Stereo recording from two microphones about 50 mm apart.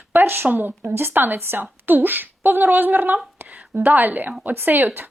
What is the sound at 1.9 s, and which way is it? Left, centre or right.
A woman's voice, right.